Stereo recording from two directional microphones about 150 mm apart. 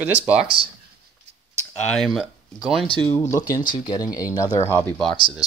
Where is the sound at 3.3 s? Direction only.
25° left (ahead or behind).